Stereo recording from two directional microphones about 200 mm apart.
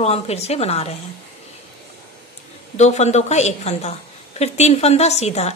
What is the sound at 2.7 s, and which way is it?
Speech, 35° left (ahead or behind).